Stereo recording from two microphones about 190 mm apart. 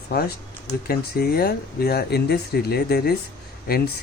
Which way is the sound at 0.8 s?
55° left (ahead or behind).